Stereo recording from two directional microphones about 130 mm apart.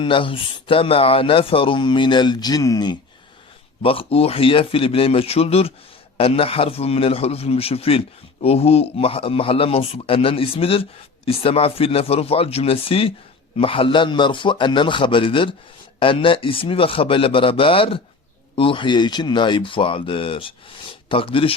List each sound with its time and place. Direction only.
0.0 s speech: 40° left (ahead or behind)
3.8 s a man's voice: 45° left (ahead or behind)